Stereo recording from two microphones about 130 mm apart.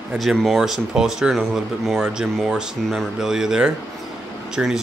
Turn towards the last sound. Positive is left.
turn(degrees=-5)  # may be behind; listen again after turning